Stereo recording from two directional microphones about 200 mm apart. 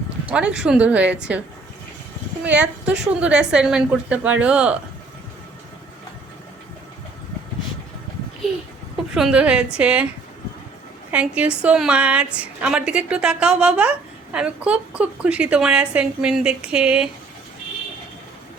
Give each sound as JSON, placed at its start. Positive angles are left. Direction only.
{"t": 0.3, "sound": "speech", "side_deg": -5}
{"t": 2.4, "sound": "a woman's voice", "side_deg": -5}
{"t": 9.1, "sound": "a woman's voice", "side_deg": -5}
{"t": 11.1, "sound": "a woman's voice", "side_deg": -5}